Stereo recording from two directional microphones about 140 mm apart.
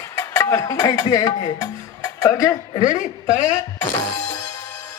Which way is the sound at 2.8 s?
65° left (ahead or behind).